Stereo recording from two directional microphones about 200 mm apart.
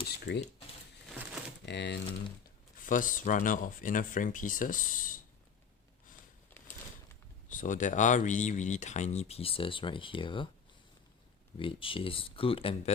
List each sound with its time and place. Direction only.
0.3 s speech: 60° left (ahead or behind)
1.6 s speech: 60° left (ahead or behind)
2.7 s speech: 40° left (ahead or behind)
7.5 s speech: 40° left (ahead or behind); by 10.5 s 25° left (ahead or behind)
11.5 s speech: 25° left (ahead or behind)